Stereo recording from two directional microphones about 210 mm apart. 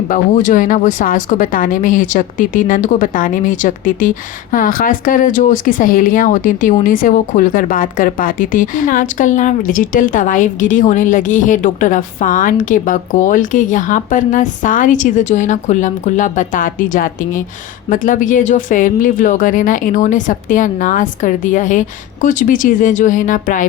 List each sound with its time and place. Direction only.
0.1 s speech: 40° left (ahead or behind)